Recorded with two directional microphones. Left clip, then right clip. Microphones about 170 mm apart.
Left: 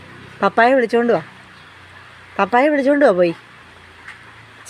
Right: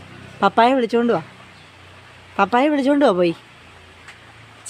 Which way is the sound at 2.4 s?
15° right (ahead or behind).